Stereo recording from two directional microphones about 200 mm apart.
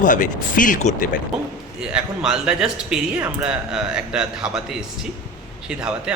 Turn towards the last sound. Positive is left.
turn(degrees=-5)  # may be behind; listen again after turning